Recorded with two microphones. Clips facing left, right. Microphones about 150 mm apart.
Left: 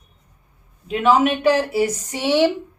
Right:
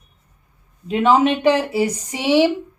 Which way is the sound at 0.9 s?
25° right (ahead or behind).